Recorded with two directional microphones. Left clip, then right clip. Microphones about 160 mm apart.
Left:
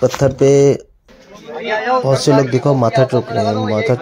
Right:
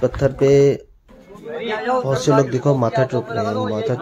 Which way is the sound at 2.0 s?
20° left (ahead or behind).